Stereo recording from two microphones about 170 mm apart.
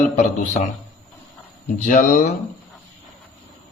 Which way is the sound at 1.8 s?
50° left (ahead or behind).